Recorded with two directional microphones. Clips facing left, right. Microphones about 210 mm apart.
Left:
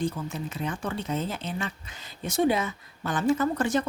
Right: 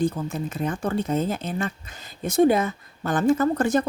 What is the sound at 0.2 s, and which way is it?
Speech, 45° right (ahead or behind).